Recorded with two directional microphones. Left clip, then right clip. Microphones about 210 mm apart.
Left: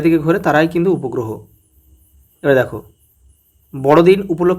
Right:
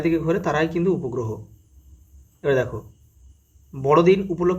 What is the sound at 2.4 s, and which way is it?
Speech, 40° left (ahead or behind).